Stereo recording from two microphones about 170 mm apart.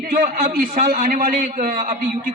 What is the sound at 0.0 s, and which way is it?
A man's voice, 50° right (ahead or behind).